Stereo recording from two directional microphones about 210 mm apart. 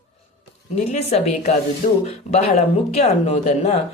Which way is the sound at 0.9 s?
30° left (ahead or behind).